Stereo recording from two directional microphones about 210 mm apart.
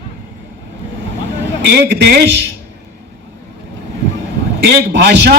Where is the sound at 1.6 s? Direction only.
50° right (ahead or behind).